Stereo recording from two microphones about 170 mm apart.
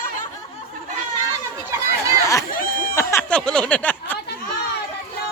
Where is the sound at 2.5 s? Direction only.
55° left (ahead or behind).